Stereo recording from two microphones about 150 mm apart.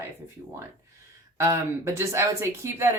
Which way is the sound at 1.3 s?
20° right (ahead or behind).